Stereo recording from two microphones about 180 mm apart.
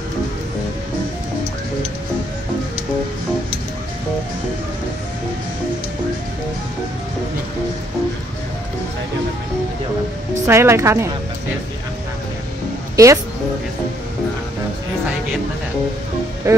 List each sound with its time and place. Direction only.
10.4 s speech: 15° right (ahead or behind)
12.9 s a woman's voice: 15° right (ahead or behind)
16.5 s music: 20° right (ahead or behind)